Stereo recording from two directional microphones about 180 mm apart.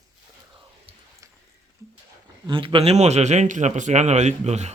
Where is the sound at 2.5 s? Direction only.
30° right (ahead or behind).